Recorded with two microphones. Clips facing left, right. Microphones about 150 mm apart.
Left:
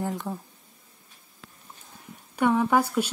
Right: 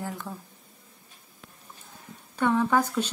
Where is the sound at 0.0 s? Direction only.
20° left (ahead or behind).